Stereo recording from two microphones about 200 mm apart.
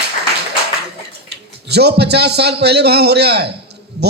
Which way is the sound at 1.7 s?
55° right (ahead or behind).